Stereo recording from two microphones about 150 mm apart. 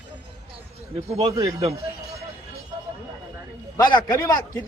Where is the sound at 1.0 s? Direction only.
45° right (ahead or behind).